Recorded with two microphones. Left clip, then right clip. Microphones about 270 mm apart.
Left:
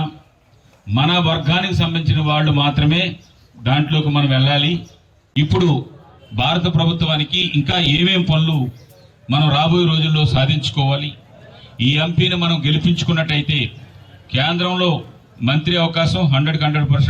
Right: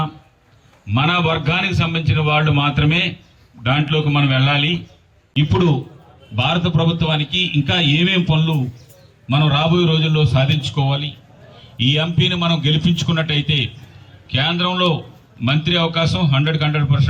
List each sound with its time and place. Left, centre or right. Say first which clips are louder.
0.9 s a man's voice: even; centre